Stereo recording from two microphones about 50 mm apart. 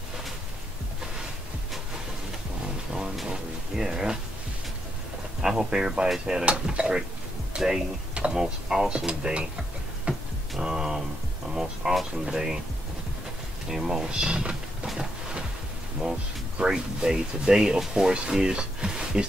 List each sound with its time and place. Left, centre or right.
3.3 s a sound: centre
5.4 s speech: centre
6.4 s speech: right
10.1 s a sound: right
10.6 s speech: centre
13.7 s speech: centre
14.9 s music: centre
16.0 s speech: centre